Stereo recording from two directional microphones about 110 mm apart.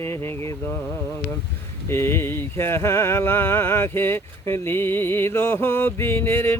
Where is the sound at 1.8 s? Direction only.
25° left (ahead or behind).